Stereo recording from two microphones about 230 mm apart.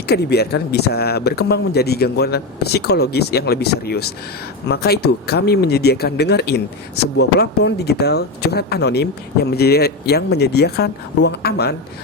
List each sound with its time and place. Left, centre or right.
0.1 s speech: left